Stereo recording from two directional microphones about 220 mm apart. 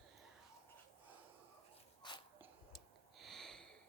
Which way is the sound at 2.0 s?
20° left (ahead or behind).